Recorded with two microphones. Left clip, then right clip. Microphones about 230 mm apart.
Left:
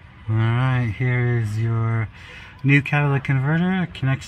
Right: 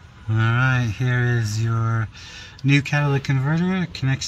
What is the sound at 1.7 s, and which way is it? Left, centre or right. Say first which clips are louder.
Speech: right 1 dB; centre.